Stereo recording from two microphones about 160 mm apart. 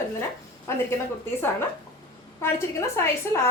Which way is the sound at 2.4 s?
15° left (ahead or behind).